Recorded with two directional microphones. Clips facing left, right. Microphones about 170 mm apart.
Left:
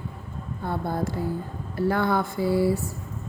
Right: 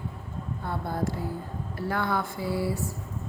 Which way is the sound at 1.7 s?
30° left (ahead or behind).